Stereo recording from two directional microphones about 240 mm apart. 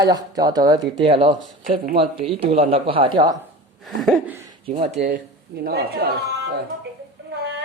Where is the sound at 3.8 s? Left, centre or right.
Centre.